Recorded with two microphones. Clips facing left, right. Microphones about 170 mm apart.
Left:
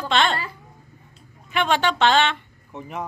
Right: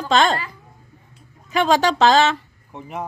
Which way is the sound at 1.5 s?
40° right (ahead or behind).